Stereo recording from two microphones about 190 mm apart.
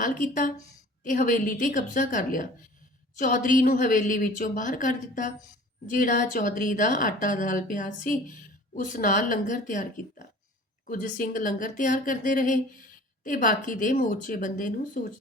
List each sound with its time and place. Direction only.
0.0 s a woman's voice: 45° left (ahead or behind)